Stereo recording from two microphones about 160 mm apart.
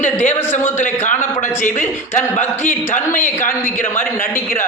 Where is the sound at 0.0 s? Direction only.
45° left (ahead or behind).